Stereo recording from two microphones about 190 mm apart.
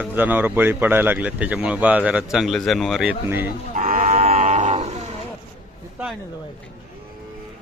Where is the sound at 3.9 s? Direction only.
40° right (ahead or behind).